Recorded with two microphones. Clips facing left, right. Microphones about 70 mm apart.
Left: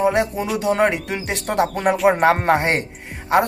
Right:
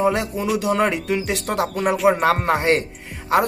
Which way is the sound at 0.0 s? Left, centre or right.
Left.